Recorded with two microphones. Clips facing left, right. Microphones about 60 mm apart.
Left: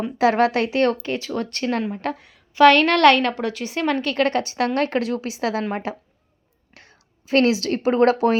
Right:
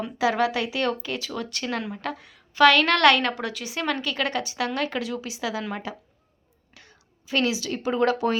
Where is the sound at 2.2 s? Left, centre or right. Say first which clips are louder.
Left 4 dB; left.